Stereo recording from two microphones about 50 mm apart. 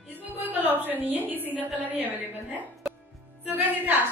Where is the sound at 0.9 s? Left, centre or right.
Right.